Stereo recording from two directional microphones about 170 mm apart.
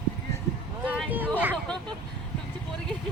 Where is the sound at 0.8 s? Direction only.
10° right (ahead or behind).